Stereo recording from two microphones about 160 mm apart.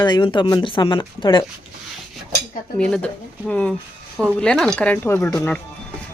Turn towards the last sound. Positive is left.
turn(degrees=10)  # may be behind; listen again after turning